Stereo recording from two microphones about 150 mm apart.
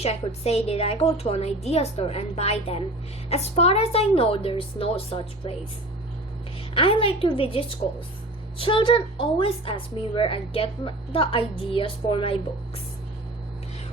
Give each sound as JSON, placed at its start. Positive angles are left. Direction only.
{"t": 0.0, "sound": "a woman's voice", "side_deg": 45}
{"t": 6.7, "sound": "a woman's voice", "side_deg": 35}